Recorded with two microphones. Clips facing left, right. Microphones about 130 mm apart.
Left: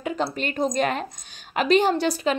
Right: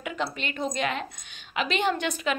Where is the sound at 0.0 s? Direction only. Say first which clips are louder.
Left 5 dB; 35° left (ahead or behind).